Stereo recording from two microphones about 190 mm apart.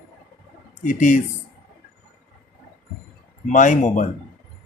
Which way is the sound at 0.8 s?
40° left (ahead or behind).